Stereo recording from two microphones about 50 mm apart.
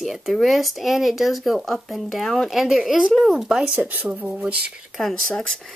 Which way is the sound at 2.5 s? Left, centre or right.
Centre.